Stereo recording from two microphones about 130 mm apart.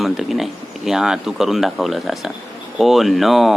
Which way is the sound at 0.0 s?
Centre (ahead or behind).